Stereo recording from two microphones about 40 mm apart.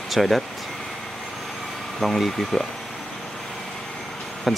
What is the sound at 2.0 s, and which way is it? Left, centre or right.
Speech, centre.